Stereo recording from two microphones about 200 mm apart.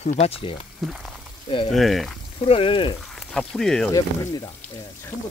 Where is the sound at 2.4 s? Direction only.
30° left (ahead or behind).